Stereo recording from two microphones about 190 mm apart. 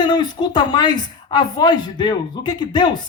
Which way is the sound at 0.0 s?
20° left (ahead or behind).